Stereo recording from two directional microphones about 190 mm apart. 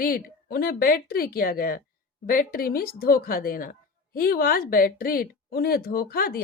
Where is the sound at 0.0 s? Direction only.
50° left (ahead or behind).